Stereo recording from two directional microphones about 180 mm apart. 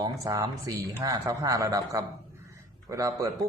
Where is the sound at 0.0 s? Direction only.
20° right (ahead or behind).